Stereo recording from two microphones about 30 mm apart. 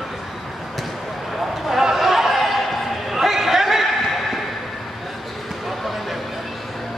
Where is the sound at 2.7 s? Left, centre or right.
Centre.